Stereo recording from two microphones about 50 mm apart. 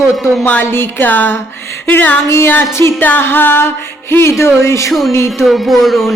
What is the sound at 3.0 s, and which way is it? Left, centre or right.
Music, left.